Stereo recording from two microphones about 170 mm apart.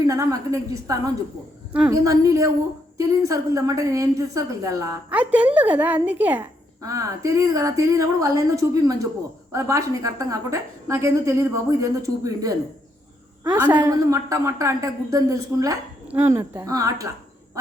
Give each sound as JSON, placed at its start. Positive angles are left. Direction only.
{"t": 0.1, "sound": "a woman's voice", "side_deg": -20}